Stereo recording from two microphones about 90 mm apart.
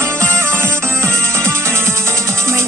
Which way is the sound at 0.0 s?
30° right (ahead or behind).